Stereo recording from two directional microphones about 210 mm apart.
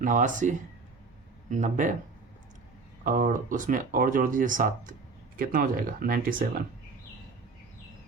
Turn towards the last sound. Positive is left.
turn(degrees=-40)  # may be behind; listen again after turning